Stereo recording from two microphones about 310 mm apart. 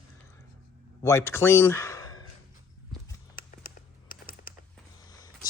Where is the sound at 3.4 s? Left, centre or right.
Left.